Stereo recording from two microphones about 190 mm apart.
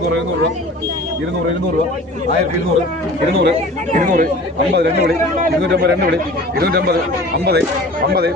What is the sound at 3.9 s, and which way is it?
Speech, 45° right (ahead or behind).